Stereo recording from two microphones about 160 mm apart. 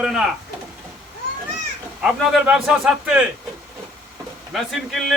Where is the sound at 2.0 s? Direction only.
5° right (ahead or behind).